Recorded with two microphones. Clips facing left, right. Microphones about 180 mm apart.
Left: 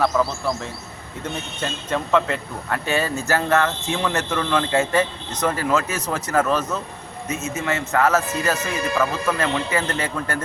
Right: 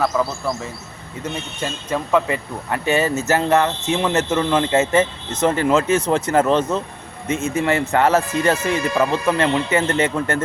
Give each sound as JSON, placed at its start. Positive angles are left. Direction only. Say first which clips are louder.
{"t": 0.0, "sound": "a man's voice", "louder": "even", "side_deg": 0}